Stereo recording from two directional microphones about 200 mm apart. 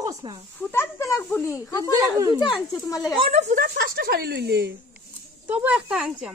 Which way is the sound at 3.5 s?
50° right (ahead or behind).